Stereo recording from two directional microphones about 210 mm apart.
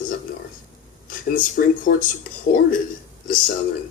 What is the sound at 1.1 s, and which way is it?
Speech, 40° left (ahead or behind).